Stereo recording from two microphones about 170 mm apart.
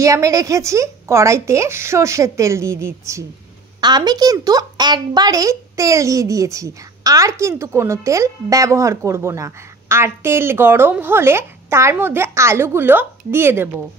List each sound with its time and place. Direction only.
0.0 s a woman's voice: 20° right (ahead or behind)